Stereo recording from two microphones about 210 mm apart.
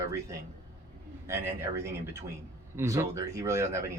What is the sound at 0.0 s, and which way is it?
A man's voice, 15° right (ahead or behind).